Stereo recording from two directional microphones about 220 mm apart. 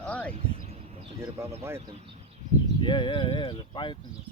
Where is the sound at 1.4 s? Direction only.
10° right (ahead or behind).